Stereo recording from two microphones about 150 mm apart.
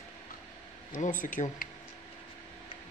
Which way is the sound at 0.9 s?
60° left (ahead or behind).